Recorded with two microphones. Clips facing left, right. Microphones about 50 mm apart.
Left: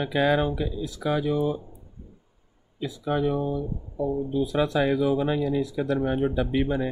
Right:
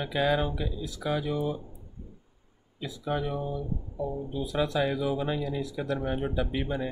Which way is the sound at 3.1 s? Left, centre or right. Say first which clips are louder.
Left 6 dB; left.